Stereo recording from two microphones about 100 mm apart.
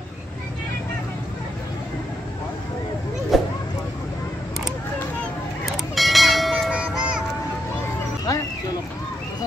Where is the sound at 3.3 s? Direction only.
Centre (ahead or behind).